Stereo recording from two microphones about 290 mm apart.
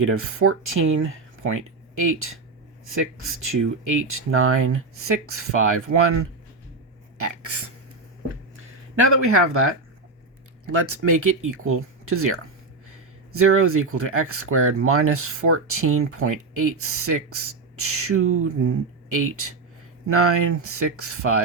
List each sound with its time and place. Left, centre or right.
0.0 s speech: right
7.2 s a sound: right
9.1 s speech: right